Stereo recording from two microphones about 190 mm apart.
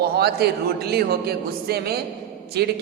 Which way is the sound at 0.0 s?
55° right (ahead or behind).